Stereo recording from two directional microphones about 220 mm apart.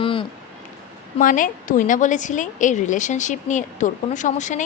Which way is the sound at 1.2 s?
40° left (ahead or behind).